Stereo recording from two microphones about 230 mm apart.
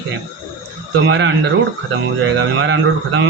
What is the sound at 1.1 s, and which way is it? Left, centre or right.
Speech, right.